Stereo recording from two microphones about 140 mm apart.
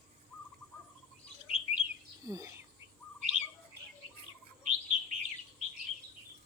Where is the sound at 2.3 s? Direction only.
25° right (ahead or behind).